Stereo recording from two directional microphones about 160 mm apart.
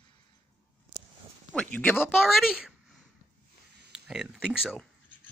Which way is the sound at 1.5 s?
10° left (ahead or behind).